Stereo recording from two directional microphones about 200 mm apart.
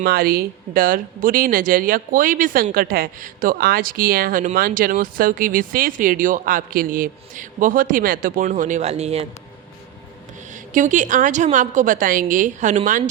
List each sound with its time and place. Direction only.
0.0 s speech: 50° right (ahead or behind); by 9.2 s 30° right (ahead or behind)
10.8 s a woman's voice: 40° right (ahead or behind)